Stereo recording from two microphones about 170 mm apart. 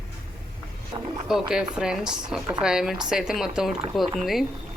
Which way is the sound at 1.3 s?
5° right (ahead or behind).